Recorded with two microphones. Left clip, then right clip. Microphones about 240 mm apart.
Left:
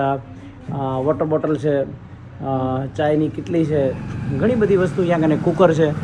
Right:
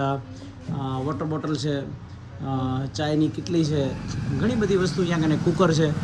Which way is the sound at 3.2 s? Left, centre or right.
Centre.